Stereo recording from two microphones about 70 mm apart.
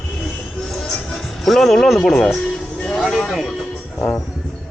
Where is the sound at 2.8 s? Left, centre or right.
Centre.